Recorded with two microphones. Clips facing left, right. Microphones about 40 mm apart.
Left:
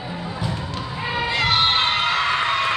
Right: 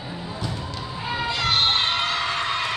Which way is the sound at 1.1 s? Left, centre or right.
Left.